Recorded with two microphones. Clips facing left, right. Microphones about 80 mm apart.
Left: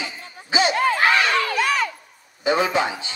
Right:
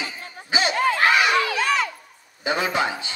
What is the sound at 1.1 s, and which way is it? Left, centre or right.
Crowd, centre.